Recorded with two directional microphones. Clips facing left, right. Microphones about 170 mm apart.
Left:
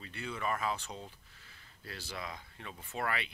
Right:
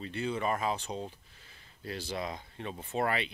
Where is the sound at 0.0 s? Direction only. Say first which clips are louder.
Right 6 dB; 25° right (ahead or behind).